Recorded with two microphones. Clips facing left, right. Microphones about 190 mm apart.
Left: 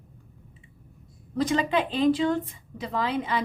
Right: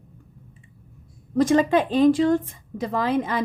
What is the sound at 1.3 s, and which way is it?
A woman's voice, 45° right (ahead or behind).